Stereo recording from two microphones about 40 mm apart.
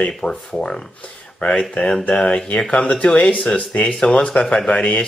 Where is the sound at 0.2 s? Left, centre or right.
Centre.